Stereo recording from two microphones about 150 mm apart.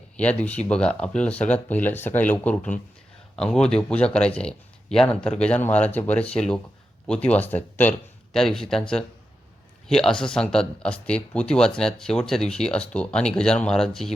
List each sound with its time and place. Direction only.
0.2 s speech: 10° left (ahead or behind)